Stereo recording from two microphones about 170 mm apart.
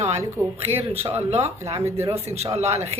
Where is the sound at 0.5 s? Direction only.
35° right (ahead or behind).